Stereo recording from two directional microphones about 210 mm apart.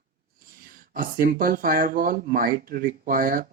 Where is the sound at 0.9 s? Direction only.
45° right (ahead or behind).